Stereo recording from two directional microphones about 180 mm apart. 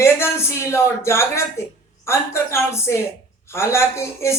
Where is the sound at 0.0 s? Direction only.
15° left (ahead or behind).